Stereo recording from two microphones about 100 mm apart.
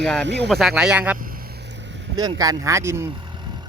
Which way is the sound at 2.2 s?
40° right (ahead or behind).